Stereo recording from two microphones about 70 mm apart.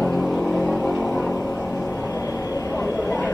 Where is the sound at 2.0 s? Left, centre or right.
Left.